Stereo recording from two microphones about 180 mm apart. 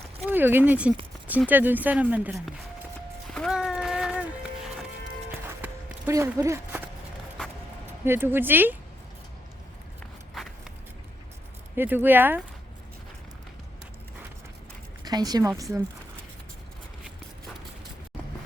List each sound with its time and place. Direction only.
0.3 s speech: 10° right (ahead or behind)
3.2 s music: 5° left (ahead or behind)
5.5 s clip-clop: 15° right (ahead or behind)
8.0 s speech: 10° right (ahead or behind)
11.8 s speech: 10° right (ahead or behind)
15.0 s speech: 20° right (ahead or behind)